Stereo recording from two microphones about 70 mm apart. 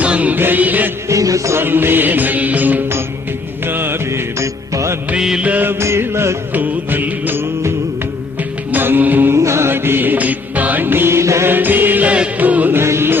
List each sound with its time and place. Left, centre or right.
0.0 s music: centre
1.0 s music: right
1.5 s music: right
5.1 s music: centre
5.4 s music: right
5.8 s music: right
6.5 s music: right
8.7 s music: right
9.3 s music: right
11.5 s music: right
12.8 s music: right